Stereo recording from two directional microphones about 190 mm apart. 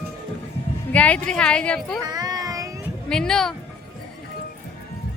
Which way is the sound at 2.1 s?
20° right (ahead or behind).